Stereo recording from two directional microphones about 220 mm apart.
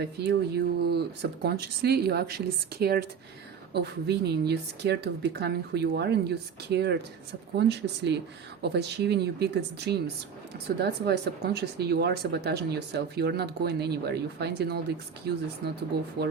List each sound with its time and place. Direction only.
0.0 s speech: 50° right (ahead or behind)